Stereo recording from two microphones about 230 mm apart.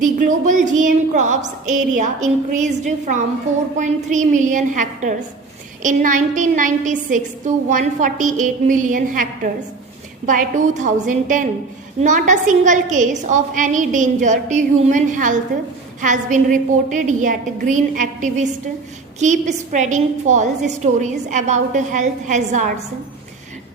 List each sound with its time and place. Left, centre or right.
0.0 s a woman's voice: right